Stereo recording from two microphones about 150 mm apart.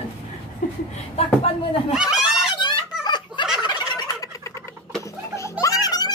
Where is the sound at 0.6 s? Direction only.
60° left (ahead or behind).